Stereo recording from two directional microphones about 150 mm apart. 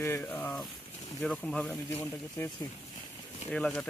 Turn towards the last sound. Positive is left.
turn(degrees=5)  # may be behind; listen again after turning